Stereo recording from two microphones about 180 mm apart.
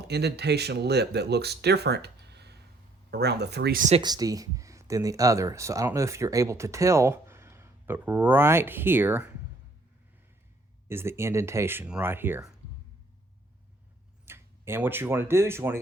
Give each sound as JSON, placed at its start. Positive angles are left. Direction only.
{"t": 0.1, "sound": "speech", "side_deg": -65}
{"t": 4.0, "sound": "speech", "side_deg": -20}
{"t": 10.8, "sound": "speech", "side_deg": -15}
{"t": 14.3, "sound": "speech", "side_deg": -15}